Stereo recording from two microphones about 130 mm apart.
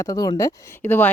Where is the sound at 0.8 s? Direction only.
15° left (ahead or behind).